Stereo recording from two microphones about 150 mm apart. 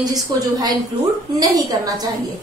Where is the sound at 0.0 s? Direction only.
25° right (ahead or behind).